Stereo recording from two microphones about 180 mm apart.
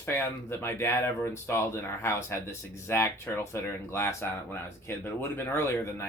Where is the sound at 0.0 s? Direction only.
15° left (ahead or behind).